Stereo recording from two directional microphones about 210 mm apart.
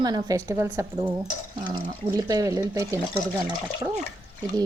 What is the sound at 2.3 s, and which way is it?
A woman's voice, 15° right (ahead or behind).